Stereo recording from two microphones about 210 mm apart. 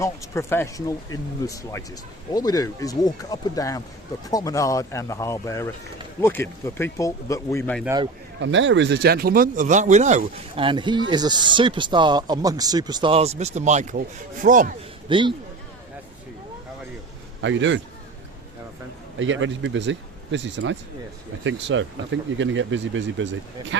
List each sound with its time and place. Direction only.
0.0 s speech: 15° left (ahead or behind)
8.4 s speech: 60° right (ahead or behind); by 14.7 s 40° right (ahead or behind)
15.1 s speech: 25° right (ahead or behind)
17.4 s speech: 60° right (ahead or behind)
19.2 s speech: 65° right (ahead or behind)